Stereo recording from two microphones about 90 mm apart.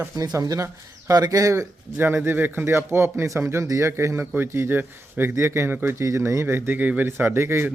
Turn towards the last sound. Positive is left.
turn(degrees=-25)  # may be behind; listen again after turning